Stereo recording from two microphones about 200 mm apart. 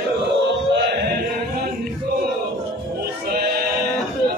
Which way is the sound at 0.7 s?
60° right (ahead or behind).